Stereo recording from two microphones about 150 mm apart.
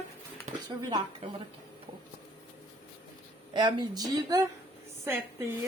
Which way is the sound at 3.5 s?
30° right (ahead or behind).